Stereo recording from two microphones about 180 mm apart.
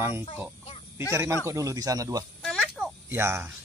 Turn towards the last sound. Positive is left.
turn(degrees=-15)  # may be behind; listen again after turning